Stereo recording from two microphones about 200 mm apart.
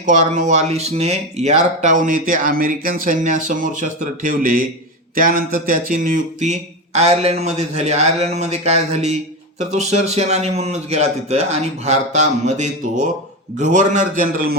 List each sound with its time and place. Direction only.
0.0 s speech: 40° right (ahead or behind)